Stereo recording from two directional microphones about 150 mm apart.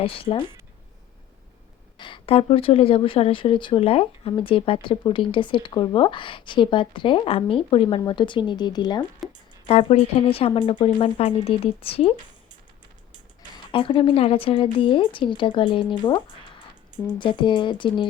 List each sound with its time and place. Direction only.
0.0 s speech: 40° left (ahead or behind)
2.0 s speech: 35° left (ahead or behind)
9.6 s speech: 45° left (ahead or behind)
13.7 s speech: 35° left (ahead or behind)